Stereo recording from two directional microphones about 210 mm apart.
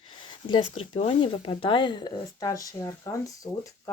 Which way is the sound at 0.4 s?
25° left (ahead or behind).